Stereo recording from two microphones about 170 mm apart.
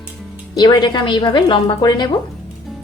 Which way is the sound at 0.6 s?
25° left (ahead or behind).